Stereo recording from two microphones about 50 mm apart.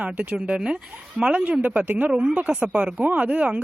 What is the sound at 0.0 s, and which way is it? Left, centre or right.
Speech, right.